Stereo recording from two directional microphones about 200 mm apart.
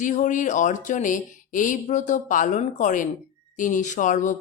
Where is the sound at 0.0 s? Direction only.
40° left (ahead or behind).